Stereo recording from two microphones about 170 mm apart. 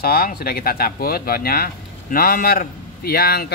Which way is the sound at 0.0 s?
60° left (ahead or behind).